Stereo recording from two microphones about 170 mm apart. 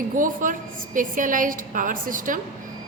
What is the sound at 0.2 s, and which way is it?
A woman's voice, 50° right (ahead or behind).